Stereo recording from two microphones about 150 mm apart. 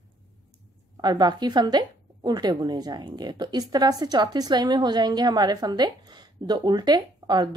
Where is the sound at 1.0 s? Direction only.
30° right (ahead or behind).